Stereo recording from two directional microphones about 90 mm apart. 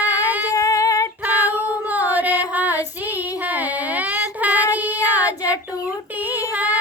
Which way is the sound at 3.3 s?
20° right (ahead or behind).